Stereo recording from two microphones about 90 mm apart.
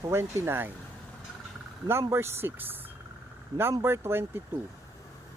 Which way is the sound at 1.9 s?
30° right (ahead or behind).